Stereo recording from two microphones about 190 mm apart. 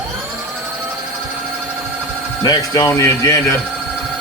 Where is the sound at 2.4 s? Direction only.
20° left (ahead or behind).